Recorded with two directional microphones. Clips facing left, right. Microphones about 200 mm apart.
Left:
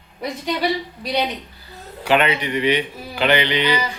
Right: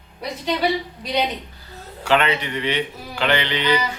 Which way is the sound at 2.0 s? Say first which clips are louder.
Left 1 dB; 15° left (ahead or behind).